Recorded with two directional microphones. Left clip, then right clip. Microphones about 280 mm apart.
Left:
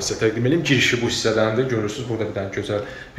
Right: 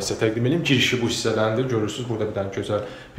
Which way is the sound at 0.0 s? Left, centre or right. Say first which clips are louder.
Left 2 dB; centre.